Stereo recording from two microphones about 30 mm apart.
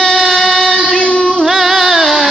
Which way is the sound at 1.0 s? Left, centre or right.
Left.